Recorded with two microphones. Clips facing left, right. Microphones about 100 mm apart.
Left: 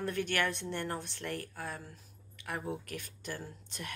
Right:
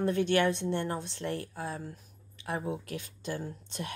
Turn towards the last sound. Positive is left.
turn(degrees=-20)  # may be behind; listen again after turning